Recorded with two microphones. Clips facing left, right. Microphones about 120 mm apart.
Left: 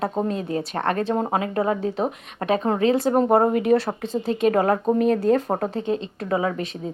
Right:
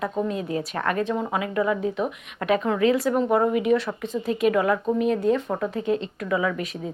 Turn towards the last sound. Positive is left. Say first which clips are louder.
# left 1 dB
turn(degrees=35)  # may be behind; listen again after turning